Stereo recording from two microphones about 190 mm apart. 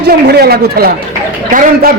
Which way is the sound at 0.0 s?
55° right (ahead or behind).